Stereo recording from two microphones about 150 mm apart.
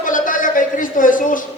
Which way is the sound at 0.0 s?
60° left (ahead or behind).